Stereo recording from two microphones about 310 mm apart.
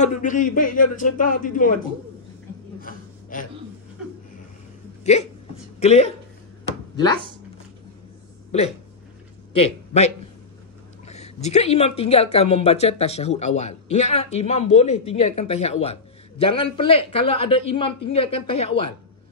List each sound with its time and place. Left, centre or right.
0.0 s speech: left
2.8 s a sound: left
5.1 s a man's voice: left
8.5 s a man's voice: left